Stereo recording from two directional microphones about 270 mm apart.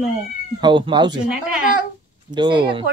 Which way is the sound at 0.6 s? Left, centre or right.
Centre.